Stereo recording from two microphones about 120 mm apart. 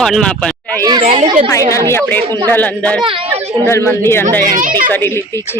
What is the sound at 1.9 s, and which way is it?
A woman's voice, 15° left (ahead or behind).